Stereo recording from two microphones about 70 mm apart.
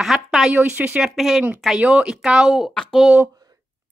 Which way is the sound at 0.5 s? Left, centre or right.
Right.